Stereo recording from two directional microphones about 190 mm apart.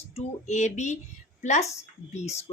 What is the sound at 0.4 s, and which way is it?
A woman's voice, 40° left (ahead or behind).